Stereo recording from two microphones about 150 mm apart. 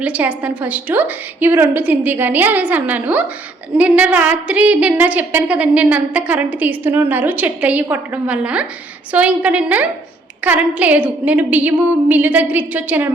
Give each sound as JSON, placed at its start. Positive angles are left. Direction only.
{"t": 0.0, "sound": "a woman's voice", "side_deg": -10}